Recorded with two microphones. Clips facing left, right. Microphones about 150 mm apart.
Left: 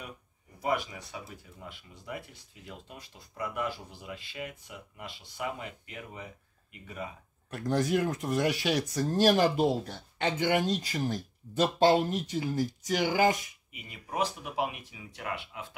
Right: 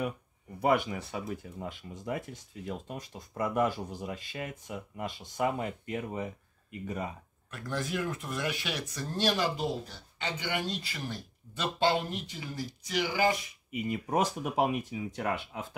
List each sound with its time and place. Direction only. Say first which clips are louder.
0.6 s speech: right 4 dB; 60° right (ahead or behind)
1.3 s speech: right 8 dB; 45° right (ahead or behind)
7.5 s speech: left 6 dB; 40° left (ahead or behind)
13.7 s speech: right 13 dB; 45° right (ahead or behind)